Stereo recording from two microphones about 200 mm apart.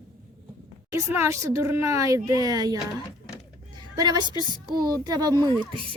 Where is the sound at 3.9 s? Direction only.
20° right (ahead or behind).